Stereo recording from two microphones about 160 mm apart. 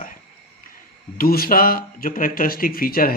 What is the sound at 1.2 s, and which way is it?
Speech, 65° left (ahead or behind).